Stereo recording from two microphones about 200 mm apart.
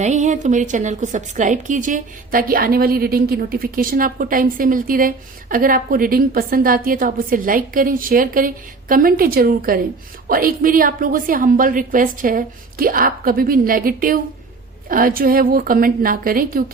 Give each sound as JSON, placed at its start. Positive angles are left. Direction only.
{"t": 0.0, "sound": "a woman's voice", "side_deg": -35}